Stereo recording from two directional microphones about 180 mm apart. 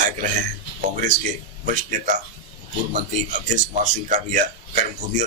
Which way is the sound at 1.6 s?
45° right (ahead or behind).